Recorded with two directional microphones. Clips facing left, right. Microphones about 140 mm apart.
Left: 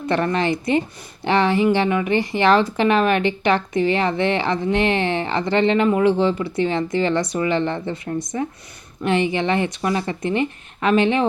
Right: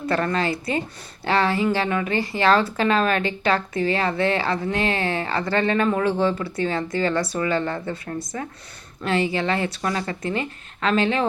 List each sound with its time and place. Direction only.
0.0 s a woman's voice: 20° left (ahead or behind)